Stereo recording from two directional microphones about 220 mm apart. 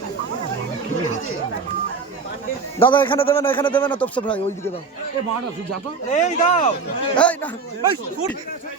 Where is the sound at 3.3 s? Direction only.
10° left (ahead or behind).